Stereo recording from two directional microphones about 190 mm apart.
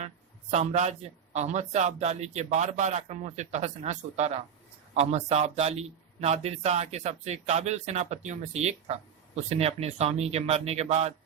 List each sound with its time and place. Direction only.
0.5 s a man's voice: 40° right (ahead or behind)